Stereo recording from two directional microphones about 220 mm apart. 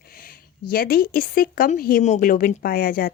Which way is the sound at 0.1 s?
40° left (ahead or behind).